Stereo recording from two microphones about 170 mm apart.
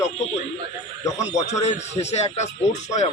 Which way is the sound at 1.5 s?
40° left (ahead or behind).